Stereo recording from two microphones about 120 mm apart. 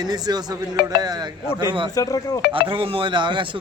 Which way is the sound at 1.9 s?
30° left (ahead or behind).